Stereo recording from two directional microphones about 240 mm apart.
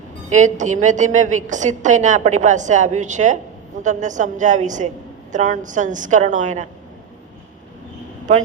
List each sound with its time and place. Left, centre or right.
0.3 s a woman's voice: right